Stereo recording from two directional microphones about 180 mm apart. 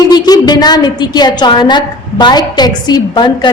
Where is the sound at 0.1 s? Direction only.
20° left (ahead or behind).